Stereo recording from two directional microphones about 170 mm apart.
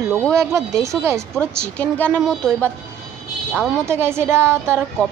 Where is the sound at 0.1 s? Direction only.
5° left (ahead or behind).